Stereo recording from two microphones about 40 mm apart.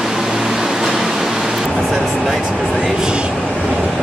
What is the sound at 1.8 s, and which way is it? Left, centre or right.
Music, centre.